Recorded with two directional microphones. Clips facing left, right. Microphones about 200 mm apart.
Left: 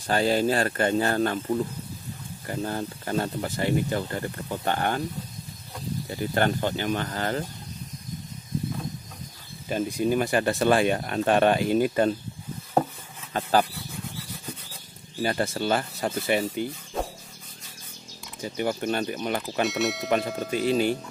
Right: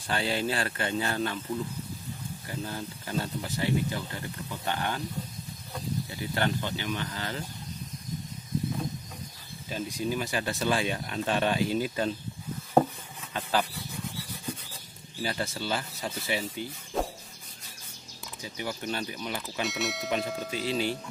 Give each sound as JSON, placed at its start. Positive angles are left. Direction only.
{"t": 0.0, "sound": "speech", "side_deg": 40}
{"t": 6.0, "sound": "speech", "side_deg": 50}
{"t": 9.7, "sound": "speech", "side_deg": 55}
{"t": 13.3, "sound": "a sound", "side_deg": 45}
{"t": 15.2, "sound": "speech", "side_deg": 55}
{"t": 17.0, "sound": "rub", "side_deg": 0}
{"t": 18.4, "sound": "speech", "side_deg": 55}
{"t": 19.6, "sound": "speech", "side_deg": 0}
{"t": 20.1, "sound": "speech", "side_deg": 55}